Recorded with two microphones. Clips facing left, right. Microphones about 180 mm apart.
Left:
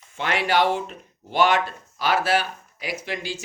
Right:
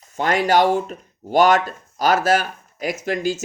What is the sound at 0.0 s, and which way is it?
Speech, 40° right (ahead or behind).